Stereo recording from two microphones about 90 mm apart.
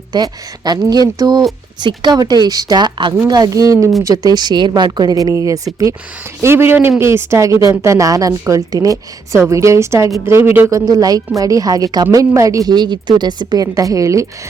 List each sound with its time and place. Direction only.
0.1 s a woman's voice: 50° right (ahead or behind)
3.2 s a woman's voice: 45° right (ahead or behind)
6.4 s a man's voice: 25° right (ahead or behind)
10.7 s a woman's voice: 40° right (ahead or behind)
12.7 s a woman's voice: 55° right (ahead or behind); by 14.3 s 35° right (ahead or behind)